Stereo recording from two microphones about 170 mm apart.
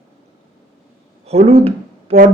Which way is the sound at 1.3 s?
35° right (ahead or behind).